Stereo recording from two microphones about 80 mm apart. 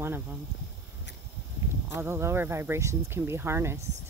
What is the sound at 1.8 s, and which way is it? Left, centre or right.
Speech, right.